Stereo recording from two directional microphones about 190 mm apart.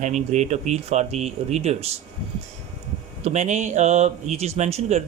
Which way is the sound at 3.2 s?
40° right (ahead or behind).